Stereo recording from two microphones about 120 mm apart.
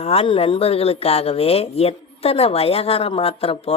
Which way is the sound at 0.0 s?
60° left (ahead or behind).